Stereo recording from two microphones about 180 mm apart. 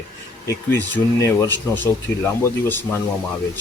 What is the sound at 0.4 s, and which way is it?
Speech, 10° left (ahead or behind).